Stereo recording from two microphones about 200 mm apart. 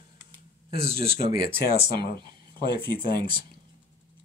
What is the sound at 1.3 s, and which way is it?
Speech, 50° left (ahead or behind).